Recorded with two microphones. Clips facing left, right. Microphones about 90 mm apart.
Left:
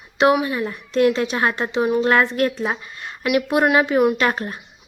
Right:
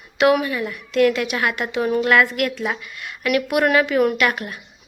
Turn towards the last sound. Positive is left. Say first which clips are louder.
# left 1 dB
turn(degrees=30)  # may be behind; listen again after turning